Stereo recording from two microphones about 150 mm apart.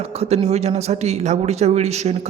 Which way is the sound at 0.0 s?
45° right (ahead or behind).